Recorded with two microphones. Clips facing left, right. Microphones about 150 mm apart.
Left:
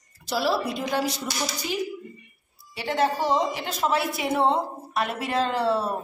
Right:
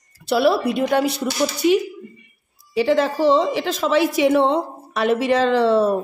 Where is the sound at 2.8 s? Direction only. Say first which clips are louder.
Right 7 dB; 90° right.